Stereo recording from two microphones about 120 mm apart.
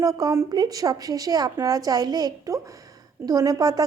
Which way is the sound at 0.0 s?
30° right (ahead or behind).